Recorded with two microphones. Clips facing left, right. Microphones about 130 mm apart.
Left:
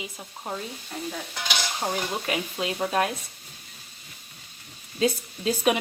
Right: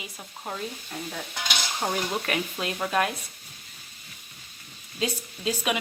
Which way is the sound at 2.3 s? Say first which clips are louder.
Left 1 dB; 20° left (ahead or behind).